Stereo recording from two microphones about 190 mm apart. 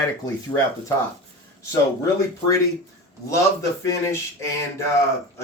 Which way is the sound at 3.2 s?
15° left (ahead or behind).